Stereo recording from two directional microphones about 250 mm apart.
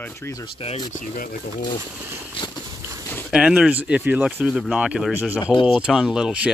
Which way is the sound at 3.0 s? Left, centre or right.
Centre.